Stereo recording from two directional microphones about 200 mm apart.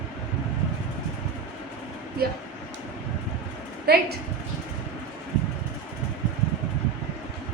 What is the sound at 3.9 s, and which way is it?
Speech, 50° right (ahead or behind).